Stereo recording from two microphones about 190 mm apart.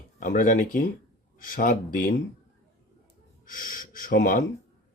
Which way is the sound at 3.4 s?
45° left (ahead or behind).